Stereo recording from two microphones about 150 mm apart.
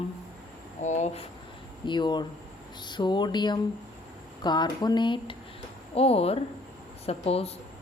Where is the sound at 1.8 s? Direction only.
30° left (ahead or behind).